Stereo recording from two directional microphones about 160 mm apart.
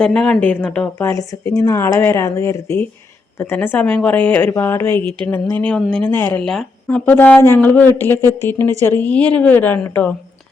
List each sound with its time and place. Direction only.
0.0 s a woman's voice: 5° left (ahead or behind)